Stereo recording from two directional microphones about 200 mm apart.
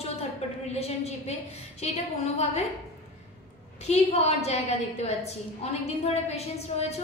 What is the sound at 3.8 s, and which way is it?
A woman's voice, 35° left (ahead or behind).